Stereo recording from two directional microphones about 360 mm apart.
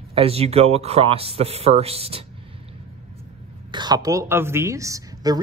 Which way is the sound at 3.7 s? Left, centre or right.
Centre.